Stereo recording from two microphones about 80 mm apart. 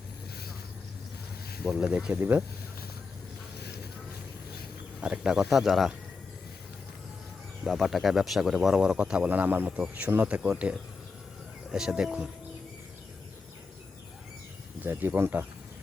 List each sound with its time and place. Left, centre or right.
1.7 s speech: centre
2.1 s speech: right
4.9 s speech: centre
7.6 s speech: centre
14.8 s speech: right